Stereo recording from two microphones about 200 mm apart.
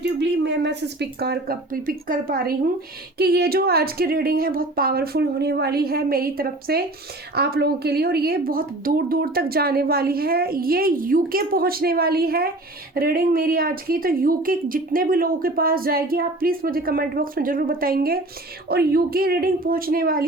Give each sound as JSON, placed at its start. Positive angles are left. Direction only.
{"t": 0.0, "sound": "speech", "side_deg": -60}